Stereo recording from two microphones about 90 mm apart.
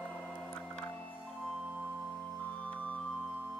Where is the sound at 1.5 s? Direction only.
15° right (ahead or behind).